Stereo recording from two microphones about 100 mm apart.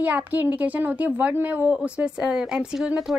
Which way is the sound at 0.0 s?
15° right (ahead or behind).